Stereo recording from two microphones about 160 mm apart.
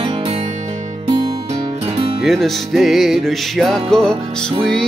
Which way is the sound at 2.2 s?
Centre (ahead or behind).